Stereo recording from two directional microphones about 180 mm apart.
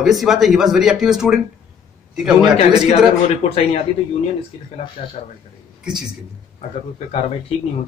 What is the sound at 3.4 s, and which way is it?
Speech, 35° left (ahead or behind).